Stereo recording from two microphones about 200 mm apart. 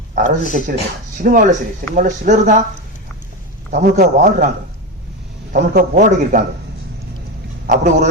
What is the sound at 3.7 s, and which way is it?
Speech, 40° right (ahead or behind).